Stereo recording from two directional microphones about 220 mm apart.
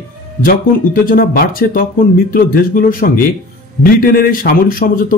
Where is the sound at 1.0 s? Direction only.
40° left (ahead or behind).